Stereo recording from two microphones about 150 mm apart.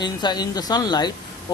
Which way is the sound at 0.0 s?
30° left (ahead or behind).